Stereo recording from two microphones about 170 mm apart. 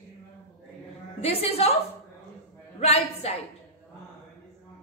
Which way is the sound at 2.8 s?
35° left (ahead or behind).